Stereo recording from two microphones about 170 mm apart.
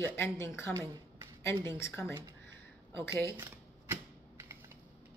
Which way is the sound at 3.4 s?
15° right (ahead or behind).